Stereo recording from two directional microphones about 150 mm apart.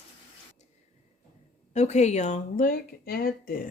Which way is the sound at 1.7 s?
50° left (ahead or behind).